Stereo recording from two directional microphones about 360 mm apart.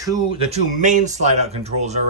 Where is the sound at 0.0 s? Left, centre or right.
Centre.